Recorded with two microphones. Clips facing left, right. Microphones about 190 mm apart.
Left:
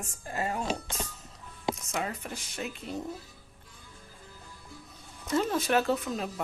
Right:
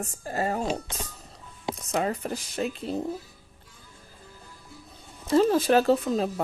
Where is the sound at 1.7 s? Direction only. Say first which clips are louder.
Right 7 dB; 35° right (ahead or behind).